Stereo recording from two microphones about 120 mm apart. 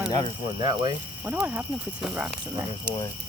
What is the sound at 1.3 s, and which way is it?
Speech, 10° right (ahead or behind).